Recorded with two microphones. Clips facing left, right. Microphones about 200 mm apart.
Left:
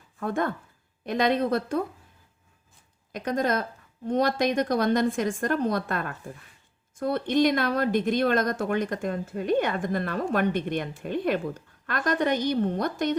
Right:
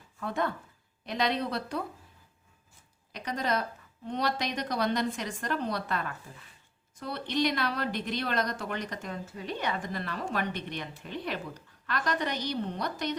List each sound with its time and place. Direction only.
0.2 s a woman's voice: 50° left (ahead or behind)
3.1 s a woman's voice: 50° left (ahead or behind)